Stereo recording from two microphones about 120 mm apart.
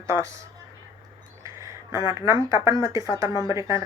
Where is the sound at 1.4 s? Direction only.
25° right (ahead or behind).